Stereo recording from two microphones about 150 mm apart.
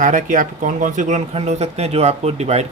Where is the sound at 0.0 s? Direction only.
60° right (ahead or behind).